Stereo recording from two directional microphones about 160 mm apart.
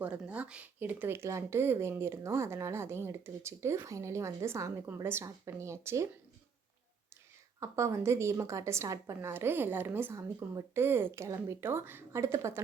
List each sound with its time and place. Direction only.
0.0 s speech: 10° right (ahead or behind)
7.6 s speech: 20° right (ahead or behind)